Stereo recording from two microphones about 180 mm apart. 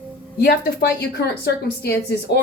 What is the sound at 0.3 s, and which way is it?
A woman's voice, 60° left (ahead or behind).